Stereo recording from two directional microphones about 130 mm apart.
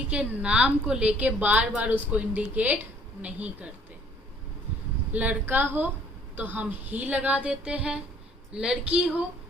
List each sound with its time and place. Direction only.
0.1 s a woman's voice: 10° right (ahead or behind)
5.1 s a woman's voice: 10° right (ahead or behind)